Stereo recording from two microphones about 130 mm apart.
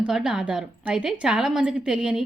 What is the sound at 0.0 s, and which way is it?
A woman's voice, 5° right (ahead or behind).